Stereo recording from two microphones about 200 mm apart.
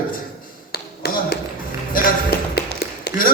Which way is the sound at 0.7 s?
50° left (ahead or behind).